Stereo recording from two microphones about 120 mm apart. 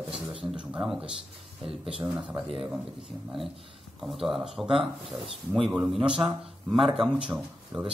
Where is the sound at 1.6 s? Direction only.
50° right (ahead or behind).